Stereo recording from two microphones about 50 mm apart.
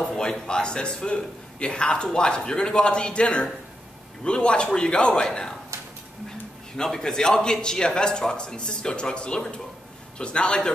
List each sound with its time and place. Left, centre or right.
0.0 s a man's voice: centre
6.8 s a man's voice: centre